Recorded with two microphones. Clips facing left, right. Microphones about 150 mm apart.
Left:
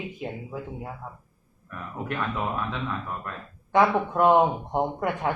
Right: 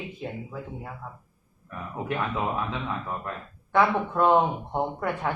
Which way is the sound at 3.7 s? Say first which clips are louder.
Left 2 dB; 15° left (ahead or behind).